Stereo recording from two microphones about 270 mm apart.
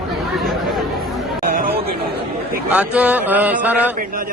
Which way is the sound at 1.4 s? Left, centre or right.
Right.